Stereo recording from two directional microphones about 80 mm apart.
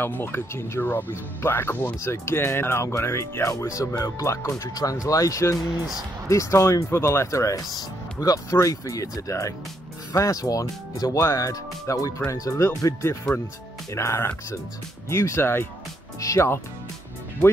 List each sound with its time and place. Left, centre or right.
0.0 s speech: left
16.2 s speech: left